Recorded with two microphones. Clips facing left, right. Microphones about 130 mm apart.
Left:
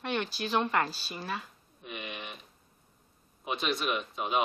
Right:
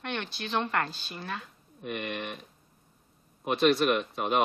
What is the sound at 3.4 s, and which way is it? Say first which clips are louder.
Speech: right 8 dB; 60° right (ahead or behind).